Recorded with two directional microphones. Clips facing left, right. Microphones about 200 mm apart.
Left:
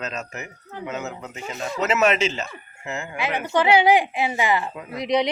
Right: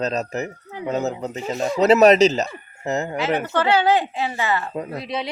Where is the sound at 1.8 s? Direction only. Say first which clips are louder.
Right 8 dB; 35° right (ahead or behind).